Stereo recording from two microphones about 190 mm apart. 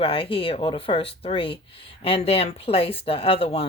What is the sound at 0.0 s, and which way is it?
Speech, 30° left (ahead or behind).